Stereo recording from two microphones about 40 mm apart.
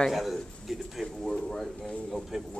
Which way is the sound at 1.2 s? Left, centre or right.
Centre.